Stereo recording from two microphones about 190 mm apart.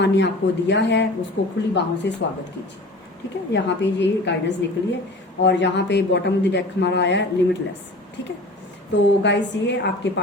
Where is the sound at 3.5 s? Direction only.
65° left (ahead or behind).